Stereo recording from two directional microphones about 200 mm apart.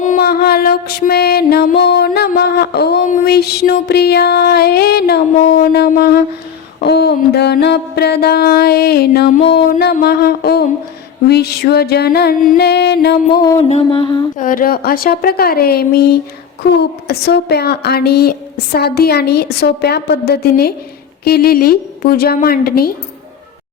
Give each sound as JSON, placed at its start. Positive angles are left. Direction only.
{"t": 0.0, "sound": "music", "side_deg": 45}
{"t": 13.3, "sound": "mantra", "side_deg": 20}
{"t": 14.3, "sound": "music", "side_deg": 45}